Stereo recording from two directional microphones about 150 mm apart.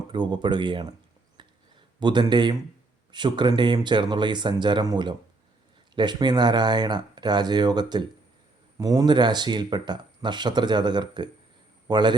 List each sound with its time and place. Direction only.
0.1 s speech: 30° right (ahead or behind)
1.4 s a sound: 30° right (ahead or behind)
3.1 s a man's voice: 30° right (ahead or behind)